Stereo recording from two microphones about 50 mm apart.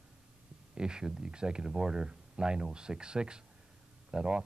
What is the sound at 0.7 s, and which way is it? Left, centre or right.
Speech, centre.